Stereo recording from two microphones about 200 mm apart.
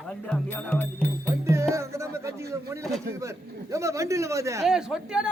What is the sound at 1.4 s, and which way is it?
Music, 15° right (ahead or behind).